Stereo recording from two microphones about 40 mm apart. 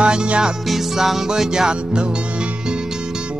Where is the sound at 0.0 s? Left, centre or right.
Right.